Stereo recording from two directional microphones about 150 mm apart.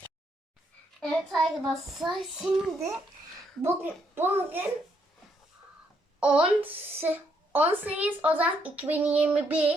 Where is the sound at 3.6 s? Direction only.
15° right (ahead or behind).